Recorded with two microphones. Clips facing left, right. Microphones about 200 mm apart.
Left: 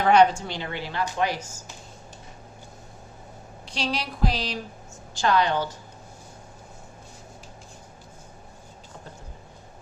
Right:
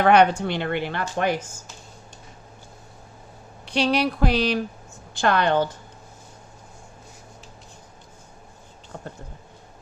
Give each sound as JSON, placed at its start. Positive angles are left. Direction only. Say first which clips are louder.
{"t": 0.0, "sound": "a woman's voice", "louder": "right 2 dB", "side_deg": -60}
{"t": 3.7, "sound": "a woman's voice", "louder": "right 8 dB", "side_deg": -60}